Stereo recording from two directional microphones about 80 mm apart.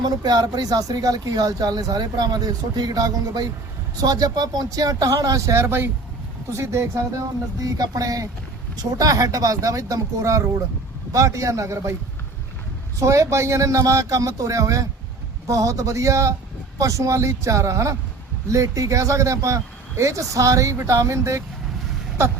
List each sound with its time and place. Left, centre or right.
0.0 s speech: right
5.5 s speech: right
13.0 s speech: right